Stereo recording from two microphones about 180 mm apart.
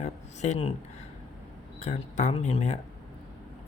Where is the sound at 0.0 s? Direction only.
40° left (ahead or behind).